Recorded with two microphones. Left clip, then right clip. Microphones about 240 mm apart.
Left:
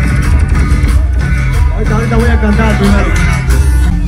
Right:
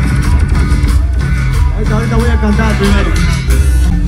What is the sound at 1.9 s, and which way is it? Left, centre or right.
Music, right.